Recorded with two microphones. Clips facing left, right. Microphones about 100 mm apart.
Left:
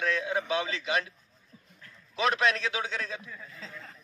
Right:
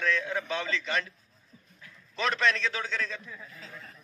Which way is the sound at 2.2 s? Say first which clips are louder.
Left 1 dB; 5° left (ahead or behind).